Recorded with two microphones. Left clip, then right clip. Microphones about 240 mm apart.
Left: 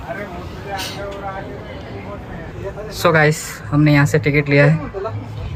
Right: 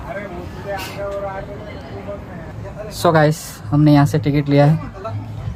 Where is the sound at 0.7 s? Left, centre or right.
Centre.